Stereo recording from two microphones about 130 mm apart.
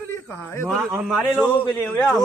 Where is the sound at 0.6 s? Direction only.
10° right (ahead or behind).